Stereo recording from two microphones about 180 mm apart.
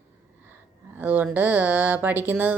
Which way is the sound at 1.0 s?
10° right (ahead or behind).